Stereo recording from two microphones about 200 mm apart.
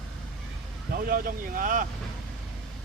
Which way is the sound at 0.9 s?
45° right (ahead or behind).